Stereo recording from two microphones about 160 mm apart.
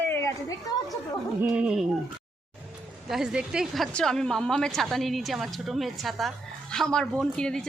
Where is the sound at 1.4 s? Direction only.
5° right (ahead or behind).